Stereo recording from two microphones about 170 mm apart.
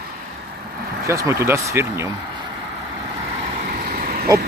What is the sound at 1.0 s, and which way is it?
Speech, 20° right (ahead or behind).